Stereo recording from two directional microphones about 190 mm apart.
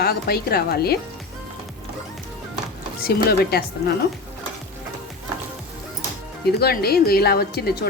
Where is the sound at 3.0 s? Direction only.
55° left (ahead or behind).